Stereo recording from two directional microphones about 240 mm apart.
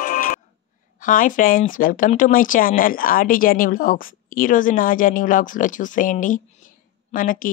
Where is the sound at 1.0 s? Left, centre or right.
Left.